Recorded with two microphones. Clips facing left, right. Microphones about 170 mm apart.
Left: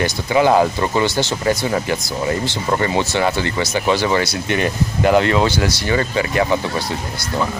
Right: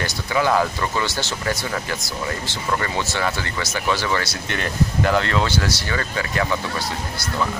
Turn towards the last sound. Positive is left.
turn(degrees=20)  # may be behind; listen again after turning